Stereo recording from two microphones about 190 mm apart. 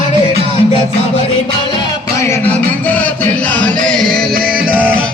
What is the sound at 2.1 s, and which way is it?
Music, 15° left (ahead or behind).